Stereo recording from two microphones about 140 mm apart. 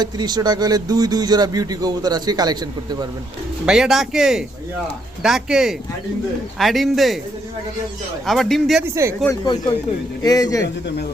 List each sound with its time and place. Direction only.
0.0 s speech: 30° right (ahead or behind)
3.7 s speech: 5° right (ahead or behind)
8.3 s speech: centre (ahead or behind)
9.2 s speech: 25° left (ahead or behind)